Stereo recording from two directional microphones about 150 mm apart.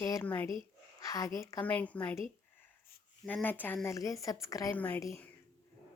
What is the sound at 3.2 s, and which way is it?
A woman's voice, 10° left (ahead or behind).